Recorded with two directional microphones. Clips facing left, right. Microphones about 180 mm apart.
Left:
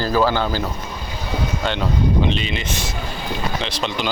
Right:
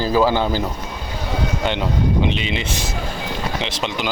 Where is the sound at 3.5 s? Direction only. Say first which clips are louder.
Even; 20° right (ahead or behind).